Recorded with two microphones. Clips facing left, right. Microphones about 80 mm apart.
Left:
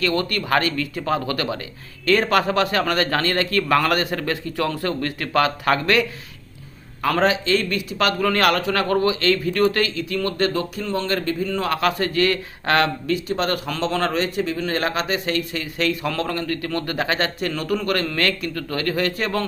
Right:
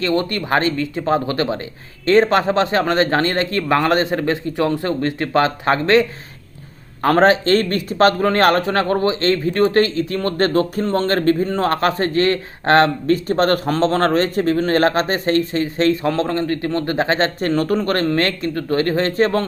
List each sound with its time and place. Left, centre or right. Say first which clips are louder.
0.0 s a man's voice: right 3 dB; right
7.0 s speech: right 6 dB; right